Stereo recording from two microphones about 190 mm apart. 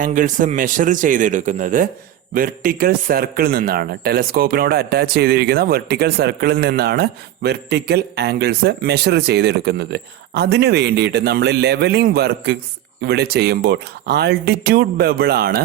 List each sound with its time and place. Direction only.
0.0 s a man's voice: 45° right (ahead or behind)